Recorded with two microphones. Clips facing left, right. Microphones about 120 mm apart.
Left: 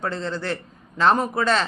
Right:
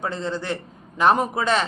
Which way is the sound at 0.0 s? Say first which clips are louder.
Even; 15° right (ahead or behind).